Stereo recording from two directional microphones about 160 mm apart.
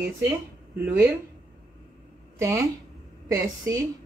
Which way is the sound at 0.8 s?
15° right (ahead or behind).